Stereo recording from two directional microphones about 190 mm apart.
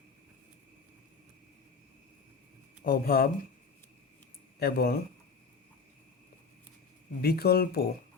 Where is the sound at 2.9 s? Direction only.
50° left (ahead or behind).